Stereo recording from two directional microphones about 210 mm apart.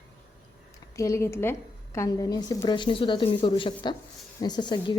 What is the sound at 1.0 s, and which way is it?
A woman's voice, 15° left (ahead or behind).